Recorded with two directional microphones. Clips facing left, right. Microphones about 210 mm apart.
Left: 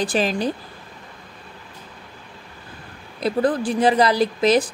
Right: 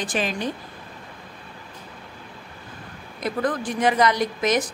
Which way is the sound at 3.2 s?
30° left (ahead or behind).